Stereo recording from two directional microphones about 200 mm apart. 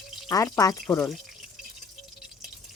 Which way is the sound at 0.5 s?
15° left (ahead or behind).